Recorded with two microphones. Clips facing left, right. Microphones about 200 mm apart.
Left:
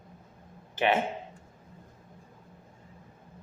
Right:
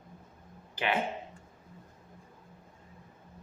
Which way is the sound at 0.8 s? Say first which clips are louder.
Left 5 dB; 25° left (ahead or behind).